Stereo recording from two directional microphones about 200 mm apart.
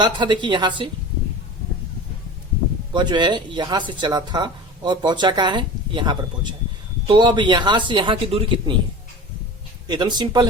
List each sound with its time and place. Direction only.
0.0 s speech: 25° right (ahead or behind)
2.9 s speech: 20° right (ahead or behind)
9.8 s speech: 20° right (ahead or behind)